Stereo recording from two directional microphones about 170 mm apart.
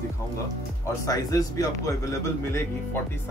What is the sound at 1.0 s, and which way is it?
Speech, 20° left (ahead or behind).